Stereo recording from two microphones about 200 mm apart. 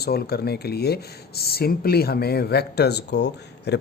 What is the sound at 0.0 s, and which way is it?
Speech, 50° left (ahead or behind).